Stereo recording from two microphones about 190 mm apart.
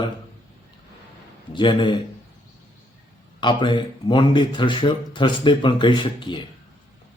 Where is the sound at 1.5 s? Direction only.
25° left (ahead or behind).